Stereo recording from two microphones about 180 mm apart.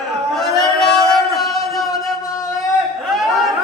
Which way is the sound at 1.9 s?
15° left (ahead or behind).